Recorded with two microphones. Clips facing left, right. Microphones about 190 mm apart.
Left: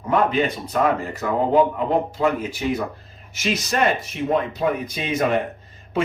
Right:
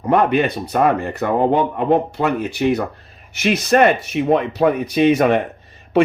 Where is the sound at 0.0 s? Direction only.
65° right (ahead or behind).